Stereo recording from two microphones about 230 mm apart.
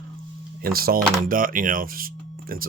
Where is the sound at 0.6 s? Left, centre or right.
Right.